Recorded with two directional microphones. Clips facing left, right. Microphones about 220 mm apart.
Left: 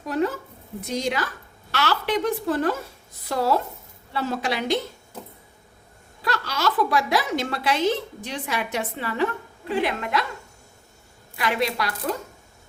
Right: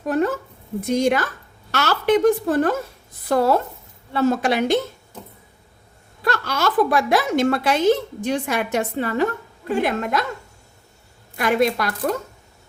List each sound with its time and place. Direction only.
0.8 s a woman's voice: 50° right (ahead or behind)
6.2 s a woman's voice: 50° right (ahead or behind)
11.3 s a woman's voice: 50° right (ahead or behind)